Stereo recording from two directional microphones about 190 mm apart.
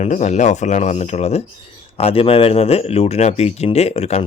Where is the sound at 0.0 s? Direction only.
35° left (ahead or behind).